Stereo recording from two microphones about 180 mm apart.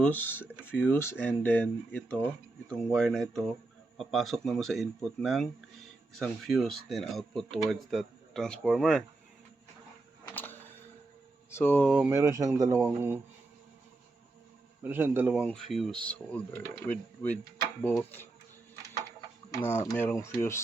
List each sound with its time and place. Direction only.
0.0 s speech: 10° left (ahead or behind)
10.3 s a sound: 10° left (ahead or behind)
11.5 s speech: 10° left (ahead or behind)
11.9 s speech: 5° right (ahead or behind)
12.1 s speech: 15° right (ahead or behind)
12.8 s speech: 10° right (ahead or behind)
14.8 s speech: 10° right (ahead or behind); by 18.3 s 10° left (ahead or behind)
19.6 s speech: 15° left (ahead or behind)